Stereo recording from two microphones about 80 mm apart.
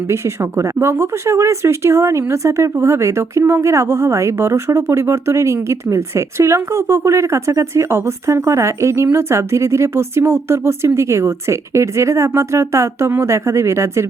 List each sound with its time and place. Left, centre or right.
0.1 s speech: right